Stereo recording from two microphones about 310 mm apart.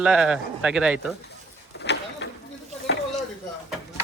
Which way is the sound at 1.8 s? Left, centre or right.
Left.